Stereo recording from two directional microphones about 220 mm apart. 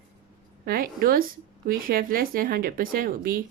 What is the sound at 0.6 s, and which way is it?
A woman's voice, 40° right (ahead or behind).